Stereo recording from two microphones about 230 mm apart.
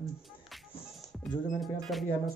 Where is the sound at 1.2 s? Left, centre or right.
Centre.